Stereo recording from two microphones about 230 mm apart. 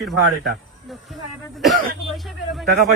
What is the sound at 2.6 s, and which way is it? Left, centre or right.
Speech, right.